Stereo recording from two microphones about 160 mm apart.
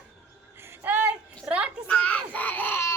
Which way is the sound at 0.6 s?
10° right (ahead or behind).